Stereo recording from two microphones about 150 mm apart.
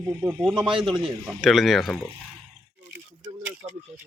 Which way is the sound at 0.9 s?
30° right (ahead or behind).